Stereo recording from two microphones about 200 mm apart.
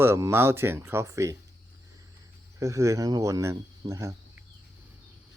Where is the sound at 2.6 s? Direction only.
15° right (ahead or behind).